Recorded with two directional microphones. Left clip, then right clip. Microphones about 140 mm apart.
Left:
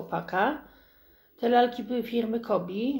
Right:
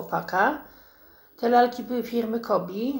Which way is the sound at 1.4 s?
35° left (ahead or behind).